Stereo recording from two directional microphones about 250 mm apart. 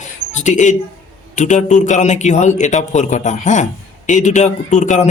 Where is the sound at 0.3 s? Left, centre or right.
Left.